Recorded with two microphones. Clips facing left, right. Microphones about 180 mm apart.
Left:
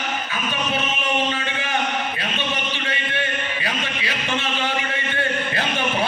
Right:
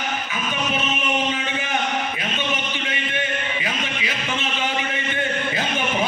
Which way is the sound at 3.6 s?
15° right (ahead or behind).